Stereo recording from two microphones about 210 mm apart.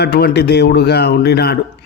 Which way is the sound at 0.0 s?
50° left (ahead or behind).